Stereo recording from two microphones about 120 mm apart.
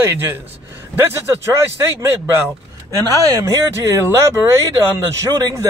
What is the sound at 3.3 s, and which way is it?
Speech, 25° right (ahead or behind).